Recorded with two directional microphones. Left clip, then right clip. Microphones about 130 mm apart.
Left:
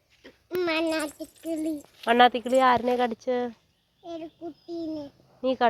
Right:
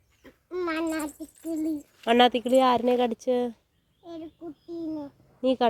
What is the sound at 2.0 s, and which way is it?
Speech, 60° right (ahead or behind).